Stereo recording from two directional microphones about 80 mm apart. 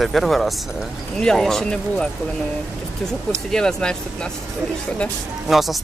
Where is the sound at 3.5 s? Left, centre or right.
Centre.